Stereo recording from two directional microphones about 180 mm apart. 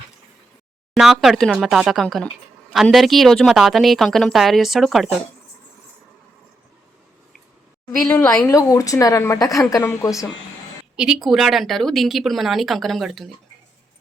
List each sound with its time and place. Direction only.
0.9 s speech: centre (ahead or behind)
8.0 s a woman's voice: 15° left (ahead or behind)
10.9 s speech: 5° right (ahead or behind)